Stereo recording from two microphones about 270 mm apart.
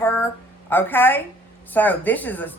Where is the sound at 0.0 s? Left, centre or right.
Centre.